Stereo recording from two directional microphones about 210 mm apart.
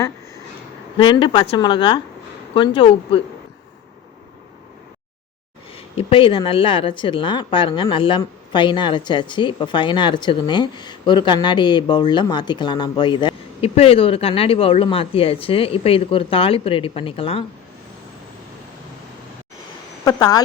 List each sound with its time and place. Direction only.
0.9 s speech: 25° left (ahead or behind)
5.7 s speech: 25° left (ahead or behind)
20.1 s speech: 15° left (ahead or behind)